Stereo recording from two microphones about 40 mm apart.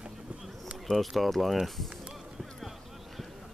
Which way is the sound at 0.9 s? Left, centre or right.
Centre.